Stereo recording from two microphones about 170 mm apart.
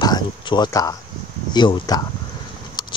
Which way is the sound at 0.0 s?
25° left (ahead or behind).